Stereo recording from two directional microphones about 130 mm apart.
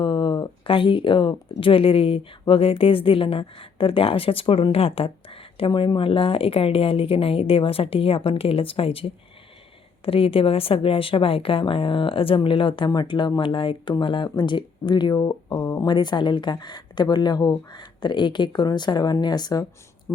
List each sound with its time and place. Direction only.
0.0 s a woman's voice: 40° left (ahead or behind)
15.9 s speech: 35° left (ahead or behind)